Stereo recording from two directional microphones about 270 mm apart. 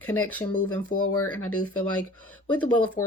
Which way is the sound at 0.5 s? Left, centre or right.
Left.